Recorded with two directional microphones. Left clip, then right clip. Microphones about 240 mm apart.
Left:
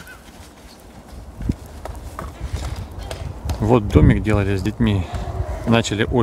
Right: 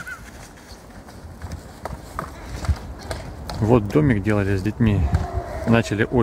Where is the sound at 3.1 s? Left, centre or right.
Centre.